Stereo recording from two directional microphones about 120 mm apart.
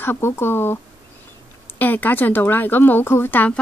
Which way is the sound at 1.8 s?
15° left (ahead or behind).